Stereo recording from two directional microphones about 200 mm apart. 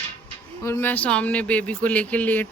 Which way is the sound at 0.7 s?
10° left (ahead or behind).